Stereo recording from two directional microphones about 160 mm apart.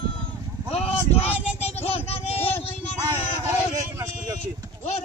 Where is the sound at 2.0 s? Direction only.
40° left (ahead or behind).